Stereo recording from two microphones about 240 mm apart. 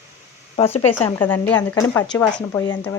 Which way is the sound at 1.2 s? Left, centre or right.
Centre.